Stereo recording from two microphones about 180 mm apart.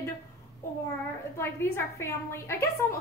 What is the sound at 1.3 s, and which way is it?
A woman's voice, 15° left (ahead or behind).